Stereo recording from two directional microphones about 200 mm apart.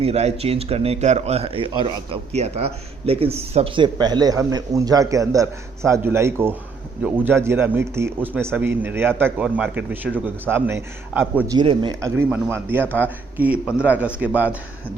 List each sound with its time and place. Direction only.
0.0 s speech: 30° right (ahead or behind); by 11.5 s 10° right (ahead or behind)
11.5 s speech: 25° right (ahead or behind); by 14.5 s 10° right (ahead or behind)